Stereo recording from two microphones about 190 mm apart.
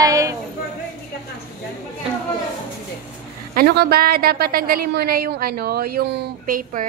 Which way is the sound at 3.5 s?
55° right (ahead or behind).